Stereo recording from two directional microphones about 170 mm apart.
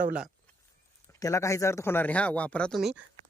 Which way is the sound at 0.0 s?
5° right (ahead or behind).